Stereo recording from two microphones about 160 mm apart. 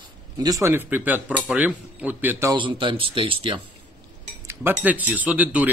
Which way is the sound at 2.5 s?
30° right (ahead or behind).